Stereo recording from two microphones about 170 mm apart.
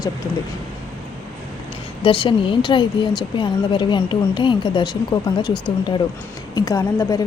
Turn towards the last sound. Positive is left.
turn(degrees=20)  # may be behind; listen again after turning